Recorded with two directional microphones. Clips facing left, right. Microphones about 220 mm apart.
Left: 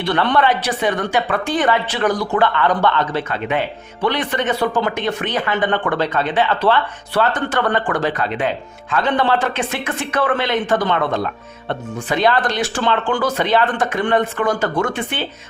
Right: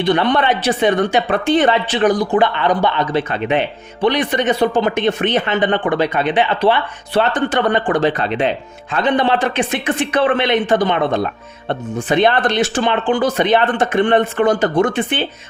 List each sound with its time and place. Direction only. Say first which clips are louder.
0.0 s speech: right 2 dB; 15° right (ahead or behind)